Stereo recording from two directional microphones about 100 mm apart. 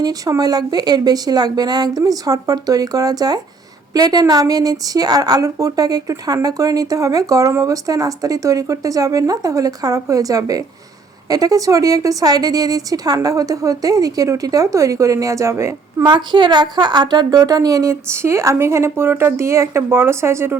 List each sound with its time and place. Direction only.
0.0 s a woman's voice: 40° right (ahead or behind)
16.0 s a woman's voice: 50° right (ahead or behind); by 20.6 s 25° right (ahead or behind)